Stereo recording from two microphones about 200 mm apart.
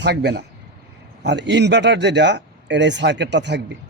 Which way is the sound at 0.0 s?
55° right (ahead or behind).